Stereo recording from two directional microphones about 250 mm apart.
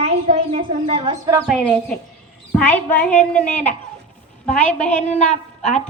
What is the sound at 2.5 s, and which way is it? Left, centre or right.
A woman's voice, centre.